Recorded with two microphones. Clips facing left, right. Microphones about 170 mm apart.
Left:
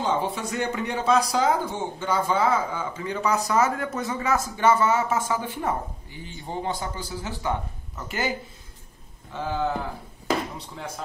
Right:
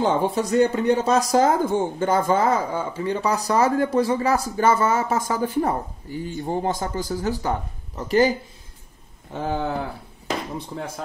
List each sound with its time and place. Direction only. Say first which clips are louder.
0.0 s speech: right 5 dB; 45° right (ahead or behind)
9.3 s speech: right 4 dB; 50° right (ahead or behind)